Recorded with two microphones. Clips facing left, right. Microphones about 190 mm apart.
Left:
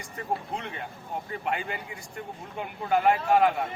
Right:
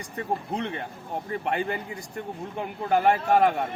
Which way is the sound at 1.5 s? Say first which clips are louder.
Right 4 dB; 40° right (ahead or behind).